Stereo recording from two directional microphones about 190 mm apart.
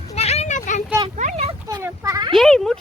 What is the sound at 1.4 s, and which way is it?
Speech, 20° right (ahead or behind).